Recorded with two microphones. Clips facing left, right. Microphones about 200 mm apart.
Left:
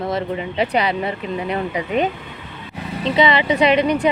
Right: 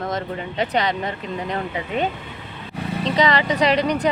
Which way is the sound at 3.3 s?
40° right (ahead or behind).